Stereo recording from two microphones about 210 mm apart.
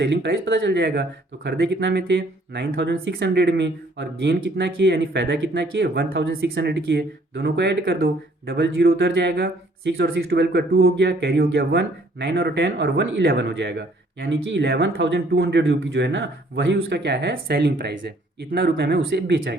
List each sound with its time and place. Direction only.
0.0 s speech: 55° right (ahead or behind)